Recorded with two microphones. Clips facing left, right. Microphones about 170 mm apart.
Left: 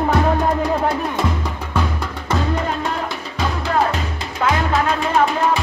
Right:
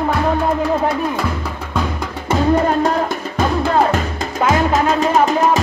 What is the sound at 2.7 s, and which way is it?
Music, 45° right (ahead or behind).